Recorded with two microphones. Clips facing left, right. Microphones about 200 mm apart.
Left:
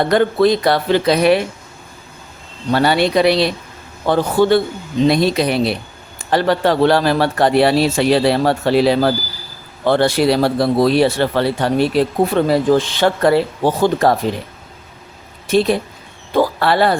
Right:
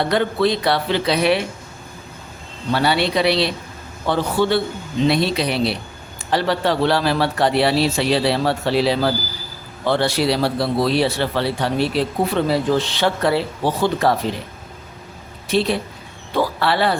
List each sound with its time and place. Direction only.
0.0 s speech: 45° left (ahead or behind)
2.7 s speech: 45° left (ahead or behind)
15.4 s speech: 45° left (ahead or behind)